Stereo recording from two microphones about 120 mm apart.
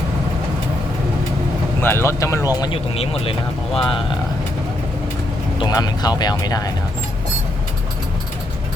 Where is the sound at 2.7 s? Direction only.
50° left (ahead or behind).